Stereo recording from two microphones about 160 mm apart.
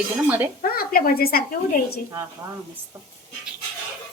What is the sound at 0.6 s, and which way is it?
Speech, 65° left (ahead or behind).